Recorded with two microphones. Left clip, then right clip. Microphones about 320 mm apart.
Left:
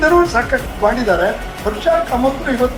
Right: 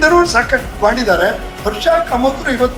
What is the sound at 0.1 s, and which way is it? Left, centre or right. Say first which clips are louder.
Speech: right 2 dB; centre.